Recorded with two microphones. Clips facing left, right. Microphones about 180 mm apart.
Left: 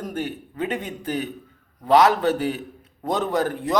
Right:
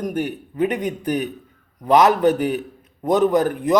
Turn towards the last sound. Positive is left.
turn(degrees=-20)  # may be behind; listen again after turning